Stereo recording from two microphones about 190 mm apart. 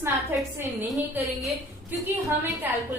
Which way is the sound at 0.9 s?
Centre (ahead or behind).